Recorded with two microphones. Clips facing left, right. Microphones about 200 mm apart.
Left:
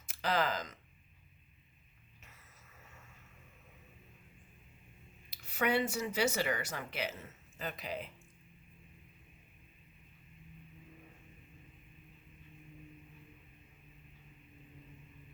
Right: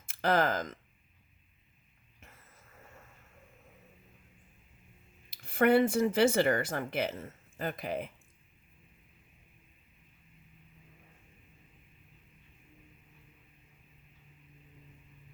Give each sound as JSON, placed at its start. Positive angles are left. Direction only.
{"t": 0.0, "sound": "speech", "side_deg": -50}
{"t": 5.3, "sound": "speech", "side_deg": -55}